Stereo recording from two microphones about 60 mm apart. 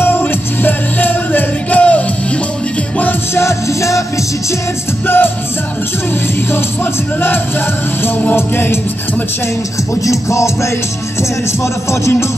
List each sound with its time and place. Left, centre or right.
0.2 s music: left
3.3 s music: left
5.0 s music: left
6.5 s music: left
10.0 s music: left